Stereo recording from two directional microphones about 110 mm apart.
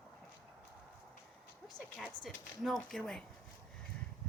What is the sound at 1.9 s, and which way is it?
Speech, centre (ahead or behind).